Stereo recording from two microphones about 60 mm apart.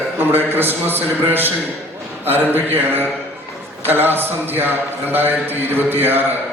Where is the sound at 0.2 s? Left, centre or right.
Right.